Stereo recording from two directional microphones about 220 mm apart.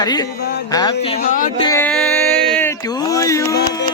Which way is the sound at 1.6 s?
10° left (ahead or behind).